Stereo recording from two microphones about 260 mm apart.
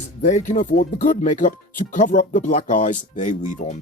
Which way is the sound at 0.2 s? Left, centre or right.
Left.